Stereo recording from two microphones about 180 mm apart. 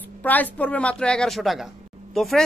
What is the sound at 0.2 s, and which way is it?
A woman's voice, 10° left (ahead or behind).